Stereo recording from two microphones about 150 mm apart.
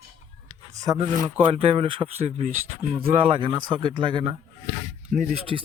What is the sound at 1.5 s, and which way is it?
Speech, 40° right (ahead or behind).